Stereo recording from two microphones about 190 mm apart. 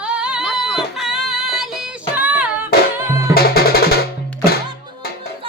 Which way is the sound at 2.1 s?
10° right (ahead or behind).